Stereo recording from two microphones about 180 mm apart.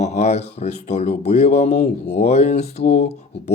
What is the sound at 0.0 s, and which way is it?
Speech, 40° left (ahead or behind).